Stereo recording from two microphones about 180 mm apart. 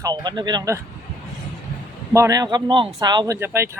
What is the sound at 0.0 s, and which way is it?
Speech, 25° right (ahead or behind).